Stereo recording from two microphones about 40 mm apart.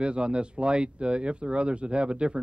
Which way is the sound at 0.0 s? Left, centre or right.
Right.